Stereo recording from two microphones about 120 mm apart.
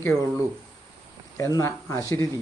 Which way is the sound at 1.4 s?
25° left (ahead or behind).